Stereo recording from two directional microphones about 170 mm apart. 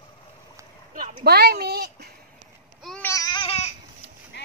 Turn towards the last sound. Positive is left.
turn(degrees=90)